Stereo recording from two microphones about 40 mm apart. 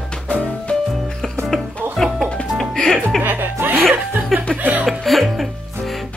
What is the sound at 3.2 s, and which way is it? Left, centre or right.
Music, right.